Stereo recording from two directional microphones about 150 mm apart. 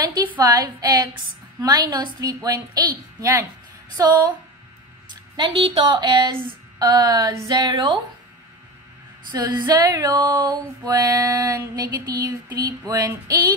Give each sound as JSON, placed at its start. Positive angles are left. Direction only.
{"t": 0.4, "sound": "female singing", "side_deg": -25}
{"t": 5.3, "sound": "speech", "side_deg": -30}
{"t": 6.8, "sound": "female singing", "side_deg": -25}
{"t": 9.3, "sound": "female singing", "side_deg": -25}